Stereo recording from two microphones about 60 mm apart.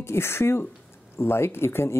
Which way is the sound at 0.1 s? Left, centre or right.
Left.